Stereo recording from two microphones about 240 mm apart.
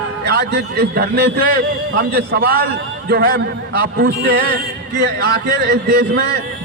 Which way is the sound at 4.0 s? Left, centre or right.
Right.